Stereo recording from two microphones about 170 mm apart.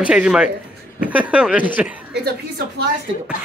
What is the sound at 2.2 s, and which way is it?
Speech, 70° right (ahead or behind).